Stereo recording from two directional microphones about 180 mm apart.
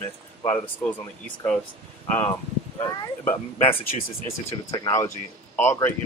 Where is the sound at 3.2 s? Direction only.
10° left (ahead or behind).